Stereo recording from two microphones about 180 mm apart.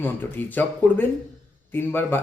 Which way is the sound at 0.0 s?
10° left (ahead or behind).